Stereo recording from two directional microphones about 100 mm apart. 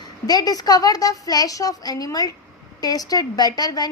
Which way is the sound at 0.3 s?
40° left (ahead or behind).